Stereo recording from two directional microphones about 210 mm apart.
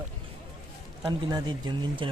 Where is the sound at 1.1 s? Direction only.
20° right (ahead or behind).